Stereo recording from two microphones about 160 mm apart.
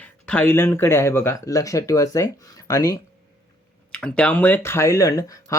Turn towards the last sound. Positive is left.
turn(degrees=20)  # may be behind; listen again after turning